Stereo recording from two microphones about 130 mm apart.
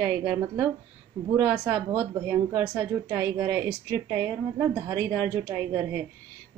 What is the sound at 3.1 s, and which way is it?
Speech, 15° right (ahead or behind).